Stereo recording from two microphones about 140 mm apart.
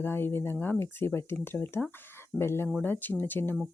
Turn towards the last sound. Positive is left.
turn(degrees=15)  # may be behind; listen again after turning